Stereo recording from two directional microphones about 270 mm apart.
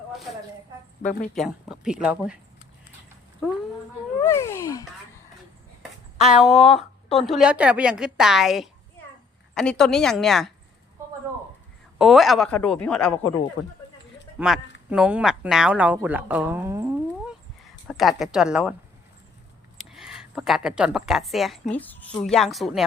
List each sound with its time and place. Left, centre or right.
1.0 s speech: left
1.4 s a woman's voice: centre
4.2 s a child's voice: centre
6.4 s a woman's voice: centre
6.7 s speech: left
7.3 s a woman's voice: centre
11.9 s a woman's voice: centre
14.3 s a woman's voice: centre
19.9 s a woman's voice: centre